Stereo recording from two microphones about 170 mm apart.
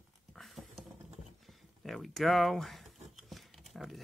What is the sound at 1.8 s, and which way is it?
Speech, centre (ahead or behind).